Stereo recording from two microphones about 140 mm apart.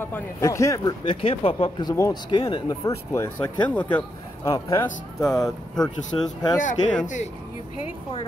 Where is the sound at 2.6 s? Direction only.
20° left (ahead or behind).